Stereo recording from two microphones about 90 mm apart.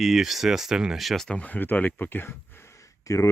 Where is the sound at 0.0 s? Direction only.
Centre (ahead or behind).